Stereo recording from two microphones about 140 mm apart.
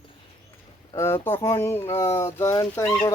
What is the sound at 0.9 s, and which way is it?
Speech, 20° left (ahead or behind).